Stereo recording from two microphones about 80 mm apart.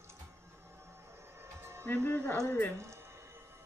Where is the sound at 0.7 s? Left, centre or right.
Right.